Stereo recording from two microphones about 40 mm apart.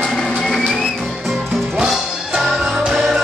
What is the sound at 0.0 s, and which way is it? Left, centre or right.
Music, centre.